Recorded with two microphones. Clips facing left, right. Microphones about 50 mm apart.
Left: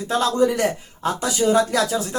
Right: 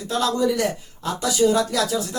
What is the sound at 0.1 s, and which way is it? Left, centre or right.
Speech, left.